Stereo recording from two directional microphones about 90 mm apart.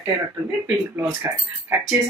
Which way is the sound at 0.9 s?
25° right (ahead or behind).